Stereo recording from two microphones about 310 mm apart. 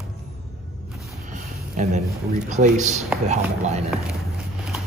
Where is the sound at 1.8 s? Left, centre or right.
Right.